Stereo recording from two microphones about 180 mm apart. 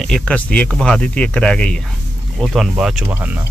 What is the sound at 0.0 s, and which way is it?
Speech, 5° left (ahead or behind).